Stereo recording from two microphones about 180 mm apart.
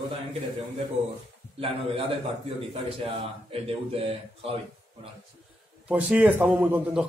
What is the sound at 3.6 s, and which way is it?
Speech, 35° right (ahead or behind).